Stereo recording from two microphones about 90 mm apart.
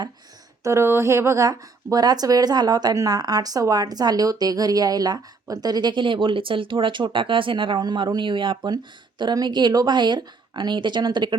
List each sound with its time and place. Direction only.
0.6 s speech: 30° right (ahead or behind); by 8.7 s 60° right (ahead or behind)
8.7 s speech: 50° right (ahead or behind)